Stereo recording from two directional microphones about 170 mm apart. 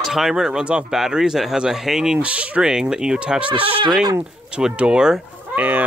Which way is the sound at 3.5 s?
30° right (ahead or behind).